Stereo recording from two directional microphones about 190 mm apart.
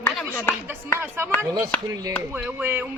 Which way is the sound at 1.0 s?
10° right (ahead or behind).